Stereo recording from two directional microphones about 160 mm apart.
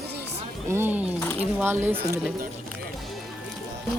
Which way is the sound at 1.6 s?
10° right (ahead or behind).